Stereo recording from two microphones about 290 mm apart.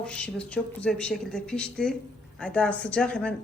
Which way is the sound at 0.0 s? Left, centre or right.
Centre.